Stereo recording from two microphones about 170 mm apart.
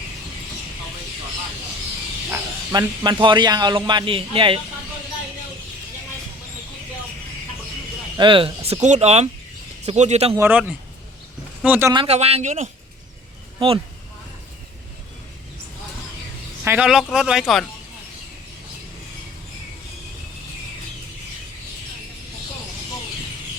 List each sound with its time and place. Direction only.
2.3 s speech: 25° right (ahead or behind)
8.1 s speech: 30° right (ahead or behind)
10.3 s speech: 10° right (ahead or behind)
11.9 s speech: 35° right (ahead or behind)
16.6 s speech: 5° right (ahead or behind)